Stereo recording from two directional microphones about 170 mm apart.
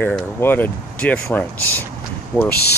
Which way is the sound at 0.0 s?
10° left (ahead or behind).